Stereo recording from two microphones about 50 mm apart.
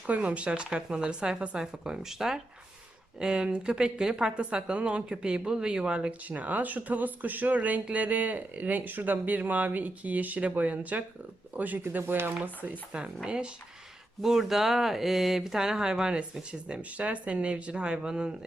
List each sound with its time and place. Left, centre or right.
0.1 s speech: right
13.2 s speech: centre
14.2 s speech: centre